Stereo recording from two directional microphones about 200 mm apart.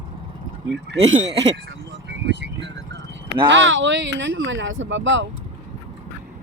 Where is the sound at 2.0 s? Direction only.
60° right (ahead or behind).